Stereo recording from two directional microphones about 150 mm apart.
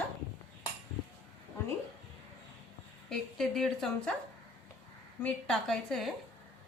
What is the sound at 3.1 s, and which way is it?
A woman's voice, centre (ahead or behind).